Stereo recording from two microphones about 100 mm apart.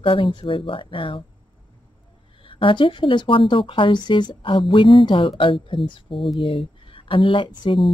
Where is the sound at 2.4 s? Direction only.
60° left (ahead or behind).